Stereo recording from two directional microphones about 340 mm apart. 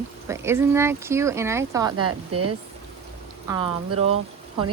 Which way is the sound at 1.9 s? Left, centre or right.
Right.